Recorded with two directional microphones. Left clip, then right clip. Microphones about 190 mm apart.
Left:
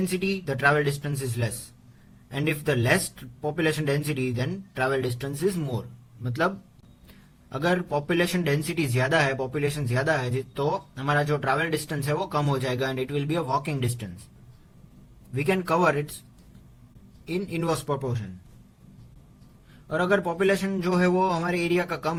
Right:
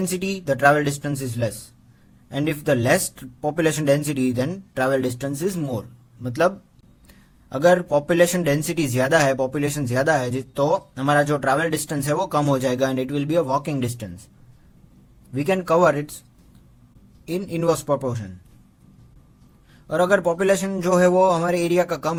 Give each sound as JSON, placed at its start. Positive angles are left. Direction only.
{"t": 0.1, "sound": "a man's voice", "side_deg": -45}
{"t": 7.5, "sound": "a man's voice", "side_deg": -45}
{"t": 15.3, "sound": "speech", "side_deg": -40}
{"t": 17.2, "sound": "a man's voice", "side_deg": -40}
{"t": 19.9, "sound": "a man's voice", "side_deg": -45}